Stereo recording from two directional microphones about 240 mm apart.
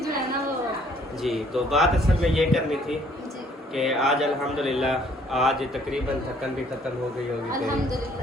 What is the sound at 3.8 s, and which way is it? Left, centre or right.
Speech, centre.